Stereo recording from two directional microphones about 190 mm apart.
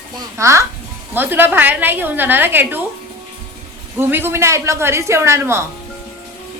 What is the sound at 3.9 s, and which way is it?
Speech, 10° right (ahead or behind).